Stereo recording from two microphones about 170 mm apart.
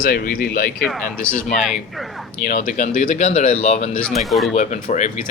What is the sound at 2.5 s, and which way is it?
Speech, 50° left (ahead or behind).